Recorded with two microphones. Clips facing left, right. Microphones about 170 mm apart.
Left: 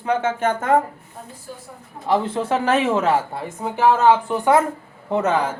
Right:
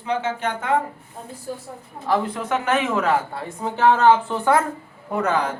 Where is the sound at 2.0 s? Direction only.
25° left (ahead or behind).